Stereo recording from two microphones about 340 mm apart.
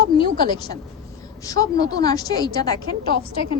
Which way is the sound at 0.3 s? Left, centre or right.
Centre.